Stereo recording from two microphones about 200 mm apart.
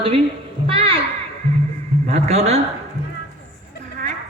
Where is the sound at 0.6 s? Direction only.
25° right (ahead or behind).